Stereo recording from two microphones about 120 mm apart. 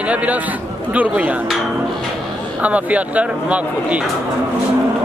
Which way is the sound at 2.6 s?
10° right (ahead or behind).